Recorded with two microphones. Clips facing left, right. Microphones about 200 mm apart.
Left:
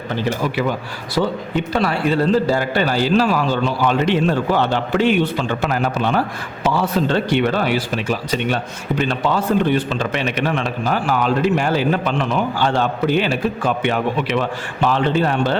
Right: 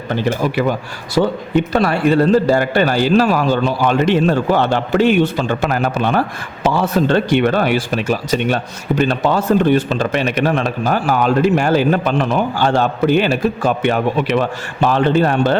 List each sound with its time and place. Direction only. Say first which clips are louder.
1.7 s a man's voice: right 3 dB; 50° right (ahead or behind)